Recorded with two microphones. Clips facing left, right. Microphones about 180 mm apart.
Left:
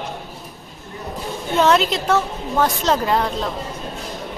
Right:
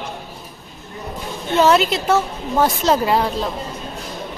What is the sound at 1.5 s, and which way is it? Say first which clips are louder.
A woman's voice: right 2 dB; 5° right (ahead or behind).